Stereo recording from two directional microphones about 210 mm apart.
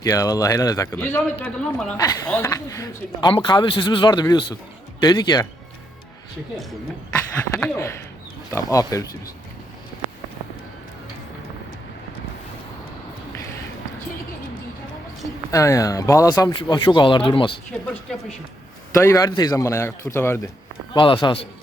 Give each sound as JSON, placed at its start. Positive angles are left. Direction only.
{"t": 0.0, "sound": "speech", "side_deg": 15}
{"t": 2.0, "sound": "speech", "side_deg": 15}
{"t": 7.6, "sound": "speech", "side_deg": 15}
{"t": 15.5, "sound": "speech", "side_deg": 15}
{"t": 18.9, "sound": "speech", "side_deg": 15}
{"t": 20.9, "sound": "speech", "side_deg": 25}